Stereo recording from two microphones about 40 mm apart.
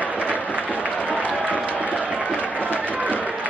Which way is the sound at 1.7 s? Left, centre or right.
Right.